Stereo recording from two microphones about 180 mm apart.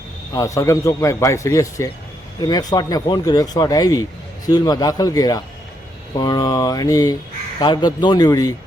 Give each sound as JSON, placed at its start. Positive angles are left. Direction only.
{"t": 0.3, "sound": "a man's voice", "side_deg": 15}